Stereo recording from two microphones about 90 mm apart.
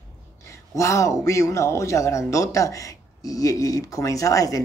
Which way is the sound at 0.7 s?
35° left (ahead or behind).